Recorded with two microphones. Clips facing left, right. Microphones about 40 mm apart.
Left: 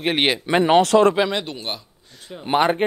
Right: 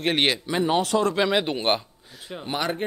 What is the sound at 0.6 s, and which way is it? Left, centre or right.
Speech, left.